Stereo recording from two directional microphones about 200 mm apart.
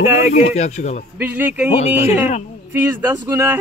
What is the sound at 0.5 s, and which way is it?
Speech, 35° left (ahead or behind).